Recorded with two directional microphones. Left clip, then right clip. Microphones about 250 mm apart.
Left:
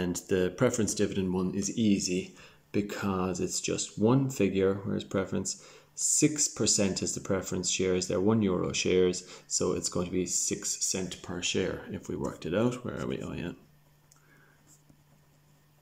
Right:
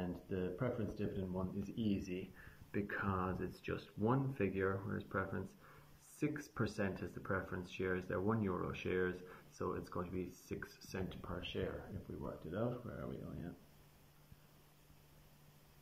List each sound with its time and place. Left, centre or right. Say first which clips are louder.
0.0 s speech: left 14 dB; left
1.6 s speech: left 13 dB; centre
11.2 s speech: left 14 dB; centre